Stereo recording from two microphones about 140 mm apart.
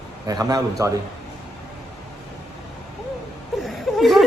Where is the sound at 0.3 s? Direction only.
25° right (ahead or behind).